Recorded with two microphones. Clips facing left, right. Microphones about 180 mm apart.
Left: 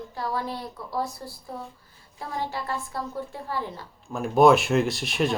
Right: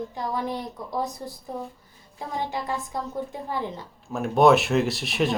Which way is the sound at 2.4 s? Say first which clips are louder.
Right 1 dB; 20° right (ahead or behind).